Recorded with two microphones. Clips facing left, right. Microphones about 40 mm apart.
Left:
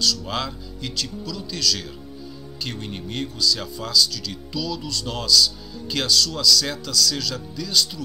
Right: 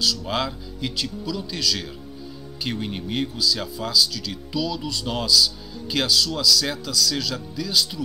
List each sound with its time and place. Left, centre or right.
0.0 s speech: centre